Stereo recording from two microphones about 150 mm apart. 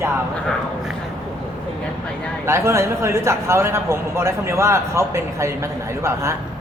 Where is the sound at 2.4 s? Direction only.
20° right (ahead or behind).